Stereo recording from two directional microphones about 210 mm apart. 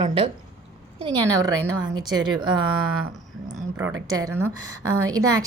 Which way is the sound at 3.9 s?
15° right (ahead or behind).